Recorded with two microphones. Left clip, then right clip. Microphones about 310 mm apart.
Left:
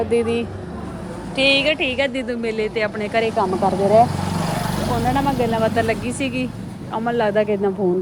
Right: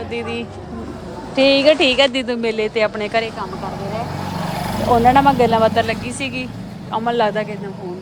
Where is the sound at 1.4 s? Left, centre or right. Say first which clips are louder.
Right 4 dB; centre.